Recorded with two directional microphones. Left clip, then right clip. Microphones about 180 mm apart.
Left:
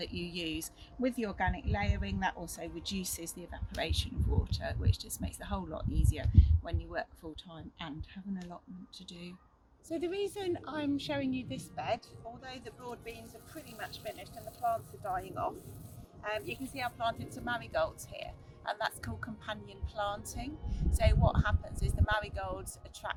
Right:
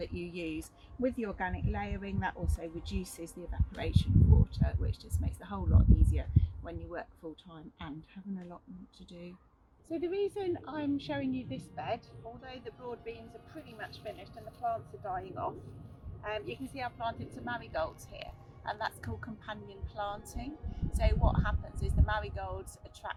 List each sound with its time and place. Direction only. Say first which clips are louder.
0.6 s speech: right 1 dB; 20° left (ahead or behind)
9.9 s speech: right 2 dB; 25° left (ahead or behind)